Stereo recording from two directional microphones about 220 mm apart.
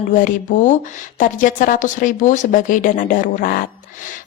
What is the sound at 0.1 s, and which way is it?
Speech, 35° left (ahead or behind).